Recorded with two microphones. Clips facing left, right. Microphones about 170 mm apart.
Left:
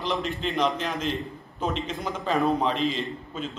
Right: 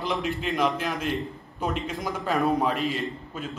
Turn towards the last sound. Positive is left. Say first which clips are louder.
# even
turn(degrees=-10)  # may be behind; listen again after turning